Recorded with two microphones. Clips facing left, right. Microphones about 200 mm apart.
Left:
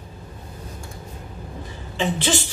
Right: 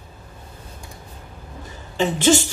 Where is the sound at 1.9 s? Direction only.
45° right (ahead or behind).